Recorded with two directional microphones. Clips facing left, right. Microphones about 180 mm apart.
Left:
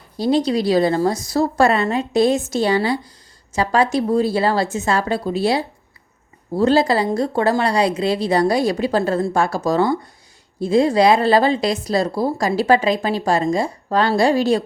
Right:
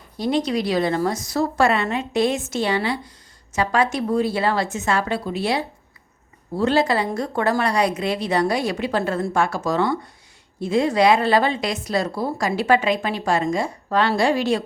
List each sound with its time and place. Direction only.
0.2 s speech: 35° left (ahead or behind)